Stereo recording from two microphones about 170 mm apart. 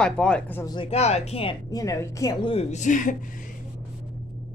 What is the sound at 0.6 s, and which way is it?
Speech, 30° left (ahead or behind).